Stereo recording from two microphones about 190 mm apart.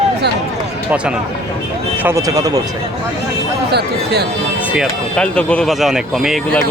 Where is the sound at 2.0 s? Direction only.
15° right (ahead or behind).